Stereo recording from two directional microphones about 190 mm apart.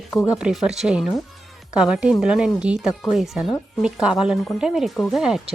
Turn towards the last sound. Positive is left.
turn(degrees=0)  # may be behind; listen again after turning